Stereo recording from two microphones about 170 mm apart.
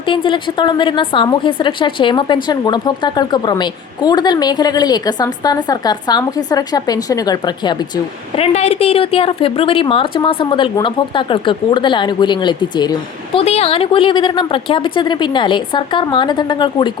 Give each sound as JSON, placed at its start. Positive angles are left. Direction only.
{"t": 0.0, "sound": "a woman's voice", "side_deg": 30}
{"t": 8.5, "sound": "a woman's voice", "side_deg": 40}
{"t": 13.4, "sound": "a woman's voice", "side_deg": 35}